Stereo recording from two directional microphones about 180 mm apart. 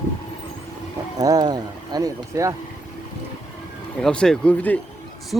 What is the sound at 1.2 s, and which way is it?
Speech, 20° right (ahead or behind).